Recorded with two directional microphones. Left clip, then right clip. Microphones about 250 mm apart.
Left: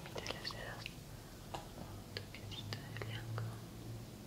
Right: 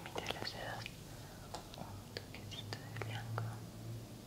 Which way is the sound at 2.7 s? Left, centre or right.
Centre.